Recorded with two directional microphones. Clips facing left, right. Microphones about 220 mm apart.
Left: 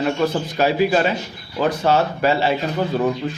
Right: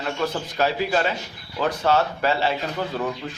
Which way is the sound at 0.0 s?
15° left (ahead or behind).